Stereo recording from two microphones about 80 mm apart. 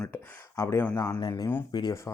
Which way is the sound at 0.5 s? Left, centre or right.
Left.